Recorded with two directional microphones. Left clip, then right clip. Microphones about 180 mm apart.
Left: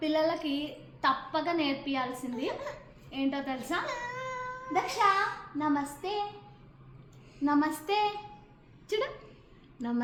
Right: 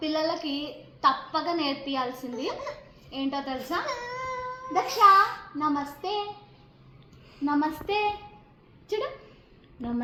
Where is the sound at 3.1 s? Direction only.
10° left (ahead or behind).